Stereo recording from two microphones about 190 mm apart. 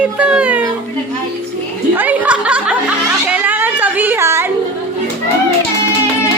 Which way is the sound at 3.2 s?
10° right (ahead or behind).